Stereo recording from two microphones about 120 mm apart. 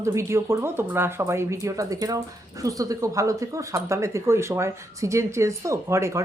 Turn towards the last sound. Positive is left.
turn(degrees=-25)  # may be behind; listen again after turning